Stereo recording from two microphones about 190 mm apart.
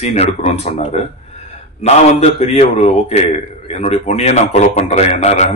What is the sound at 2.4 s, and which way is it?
A man's voice, 35° left (ahead or behind).